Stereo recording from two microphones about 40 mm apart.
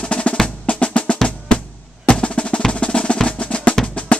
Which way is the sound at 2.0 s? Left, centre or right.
Left.